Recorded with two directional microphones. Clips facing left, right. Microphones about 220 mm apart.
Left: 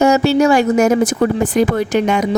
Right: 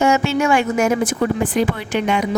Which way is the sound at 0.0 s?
40° left (ahead or behind).